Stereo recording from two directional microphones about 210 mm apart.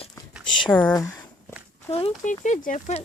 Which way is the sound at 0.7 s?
10° left (ahead or behind).